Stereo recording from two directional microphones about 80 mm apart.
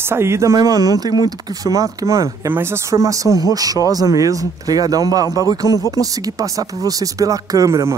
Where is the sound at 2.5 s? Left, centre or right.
Right.